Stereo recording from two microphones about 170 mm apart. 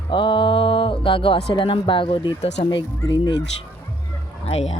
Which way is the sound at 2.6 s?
25° left (ahead or behind).